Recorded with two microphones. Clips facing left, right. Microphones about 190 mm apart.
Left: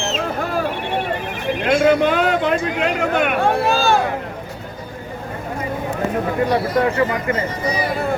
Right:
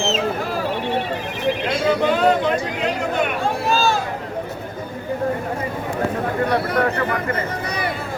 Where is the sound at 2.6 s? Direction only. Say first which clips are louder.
Left 3 dB; 65° left (ahead or behind).